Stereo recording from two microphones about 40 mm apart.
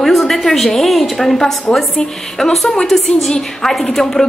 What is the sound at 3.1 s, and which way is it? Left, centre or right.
Speech, centre.